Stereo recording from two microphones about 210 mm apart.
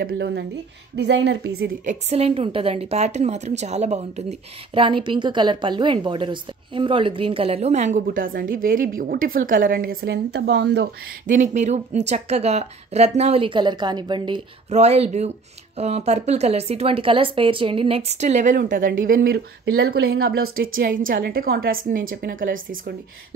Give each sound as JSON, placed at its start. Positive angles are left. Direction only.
{"t": 0.0, "sound": "a woman's voice", "side_deg": -55}
{"t": 1.9, "sound": "a woman's voice", "side_deg": -30}
{"t": 11.3, "sound": "a woman's voice", "side_deg": -35}